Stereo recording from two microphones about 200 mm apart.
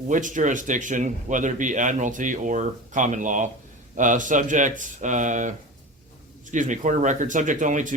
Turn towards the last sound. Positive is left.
turn(degrees=-40)  # may be behind; listen again after turning